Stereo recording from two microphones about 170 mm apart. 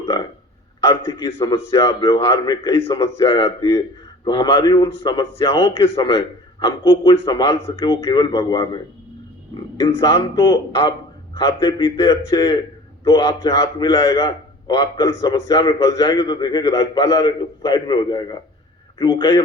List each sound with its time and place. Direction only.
0.9 s a man's voice: 20° left (ahead or behind)
9.7 s a man's voice: 20° left (ahead or behind)